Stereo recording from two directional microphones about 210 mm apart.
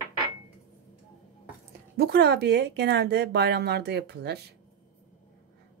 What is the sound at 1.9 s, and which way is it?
Speech, 50° right (ahead or behind).